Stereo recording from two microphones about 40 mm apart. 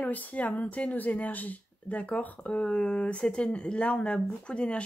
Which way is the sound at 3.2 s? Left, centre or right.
Left.